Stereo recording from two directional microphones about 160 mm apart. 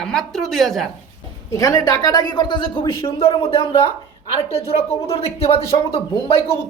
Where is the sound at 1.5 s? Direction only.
20° left (ahead or behind).